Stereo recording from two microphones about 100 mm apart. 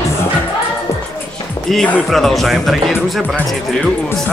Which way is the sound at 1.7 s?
5° left (ahead or behind).